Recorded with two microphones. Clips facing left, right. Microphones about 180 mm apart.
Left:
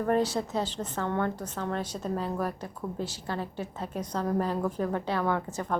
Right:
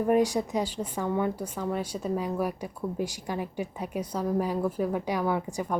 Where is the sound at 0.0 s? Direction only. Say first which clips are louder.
Right 3 dB; 15° right (ahead or behind).